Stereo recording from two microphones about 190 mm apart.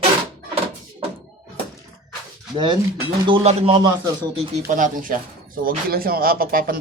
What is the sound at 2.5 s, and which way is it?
Speech, 25° right (ahead or behind).